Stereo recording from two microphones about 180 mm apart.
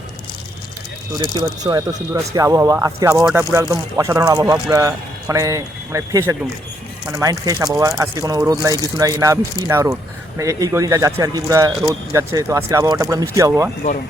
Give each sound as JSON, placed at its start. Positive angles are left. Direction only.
{"t": 1.4, "sound": "speech", "side_deg": -20}